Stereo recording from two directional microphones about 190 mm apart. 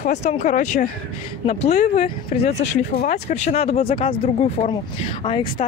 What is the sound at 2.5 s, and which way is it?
Speech, 40° left (ahead or behind).